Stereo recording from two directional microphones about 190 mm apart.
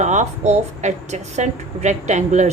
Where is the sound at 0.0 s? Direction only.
40° right (ahead or behind).